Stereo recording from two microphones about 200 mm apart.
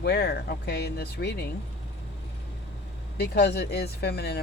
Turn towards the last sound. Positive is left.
turn(degrees=55)  # may be behind; listen again after turning